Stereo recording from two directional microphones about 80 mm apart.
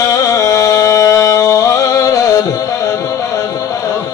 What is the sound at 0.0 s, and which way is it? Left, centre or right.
Music, left.